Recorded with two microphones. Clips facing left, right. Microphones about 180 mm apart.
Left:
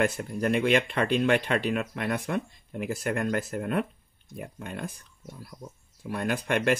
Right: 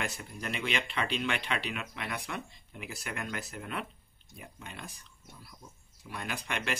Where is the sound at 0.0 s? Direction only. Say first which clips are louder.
Left 12 dB; 50° left (ahead or behind).